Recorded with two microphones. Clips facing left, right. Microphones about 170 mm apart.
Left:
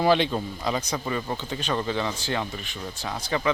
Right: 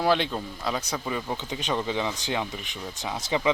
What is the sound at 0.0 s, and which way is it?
Speech, centre (ahead or behind).